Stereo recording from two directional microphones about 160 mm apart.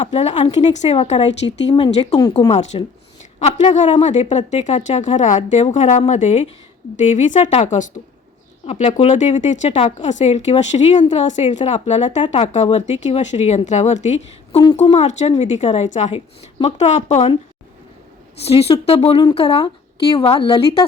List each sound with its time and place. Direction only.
0.0 s a woman's voice: 40° left (ahead or behind)
5.4 s a woman's voice: 40° left (ahead or behind)
12.2 s a woman's voice: 35° left (ahead or behind)
18.4 s a woman's voice: 40° left (ahead or behind)